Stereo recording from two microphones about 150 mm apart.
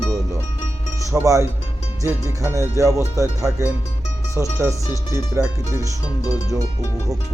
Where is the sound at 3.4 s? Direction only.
5° right (ahead or behind).